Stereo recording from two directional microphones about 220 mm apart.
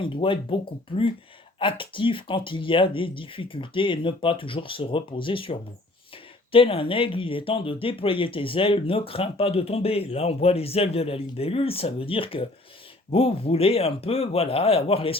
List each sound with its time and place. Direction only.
0.0 s speech: 20° left (ahead or behind)